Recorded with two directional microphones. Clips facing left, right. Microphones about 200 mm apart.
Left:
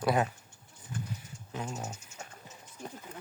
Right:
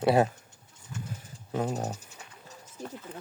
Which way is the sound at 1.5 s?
40° right (ahead or behind).